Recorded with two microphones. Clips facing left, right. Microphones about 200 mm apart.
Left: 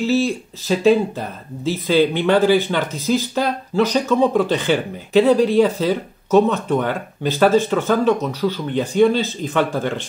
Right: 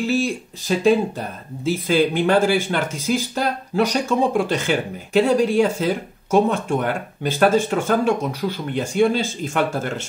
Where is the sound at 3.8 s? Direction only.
10° right (ahead or behind).